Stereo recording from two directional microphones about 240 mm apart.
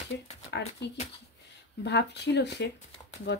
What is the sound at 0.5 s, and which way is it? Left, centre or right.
Speech, left.